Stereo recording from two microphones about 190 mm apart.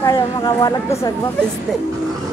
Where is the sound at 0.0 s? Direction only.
20° left (ahead or behind).